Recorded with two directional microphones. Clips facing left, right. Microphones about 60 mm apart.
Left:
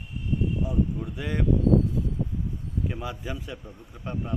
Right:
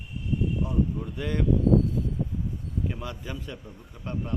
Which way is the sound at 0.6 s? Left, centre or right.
Centre.